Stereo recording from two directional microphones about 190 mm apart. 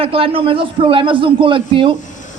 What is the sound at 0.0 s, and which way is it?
A man's voice, 30° right (ahead or behind).